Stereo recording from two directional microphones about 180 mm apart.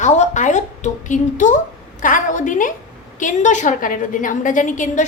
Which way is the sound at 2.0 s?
45° left (ahead or behind).